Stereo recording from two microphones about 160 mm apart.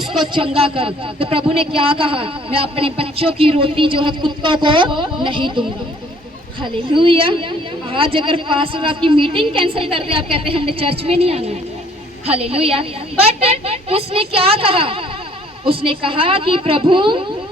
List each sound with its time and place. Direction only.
0.3 s a man's voice: 35° right (ahead or behind)